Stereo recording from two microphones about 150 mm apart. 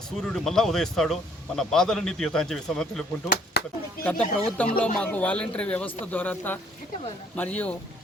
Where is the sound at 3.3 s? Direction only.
90° left.